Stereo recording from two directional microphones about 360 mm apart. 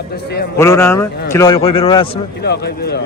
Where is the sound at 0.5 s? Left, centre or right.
Centre.